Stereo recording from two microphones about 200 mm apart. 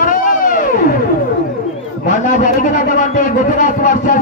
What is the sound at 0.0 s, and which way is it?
Music, 40° left (ahead or behind).